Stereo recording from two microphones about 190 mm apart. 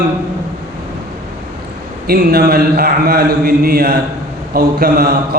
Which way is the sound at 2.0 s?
55° right (ahead or behind).